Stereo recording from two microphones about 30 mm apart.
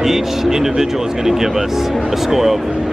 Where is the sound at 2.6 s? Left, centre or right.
Right.